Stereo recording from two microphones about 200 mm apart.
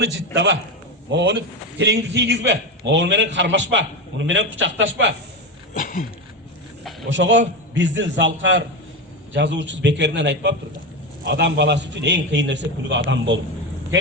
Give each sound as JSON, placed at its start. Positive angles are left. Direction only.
{"t": 0.3, "sound": "a man's voice", "side_deg": -65}
{"t": 5.7, "sound": "a sound", "side_deg": 40}
{"t": 7.1, "sound": "a man's voice", "side_deg": -65}